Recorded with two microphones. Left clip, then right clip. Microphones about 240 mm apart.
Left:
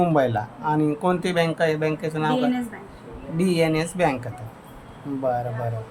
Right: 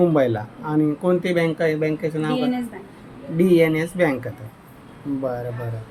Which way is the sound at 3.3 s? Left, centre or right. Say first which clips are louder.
Right 5 dB; left.